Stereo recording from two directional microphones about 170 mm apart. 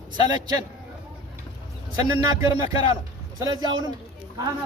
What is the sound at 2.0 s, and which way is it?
Speech, 20° right (ahead or behind).